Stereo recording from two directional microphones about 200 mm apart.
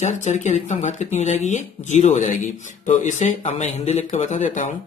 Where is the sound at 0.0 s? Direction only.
35° left (ahead or behind).